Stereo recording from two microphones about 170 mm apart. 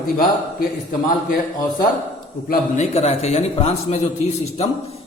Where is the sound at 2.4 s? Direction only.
40° left (ahead or behind).